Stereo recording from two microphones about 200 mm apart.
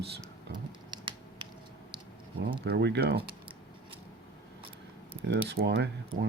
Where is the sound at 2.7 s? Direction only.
55° right (ahead or behind).